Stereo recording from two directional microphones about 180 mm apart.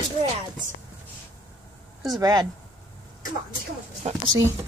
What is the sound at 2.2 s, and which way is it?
Speech, 20° right (ahead or behind).